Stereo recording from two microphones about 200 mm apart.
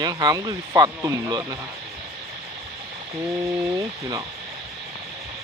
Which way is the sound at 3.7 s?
15° right (ahead or behind).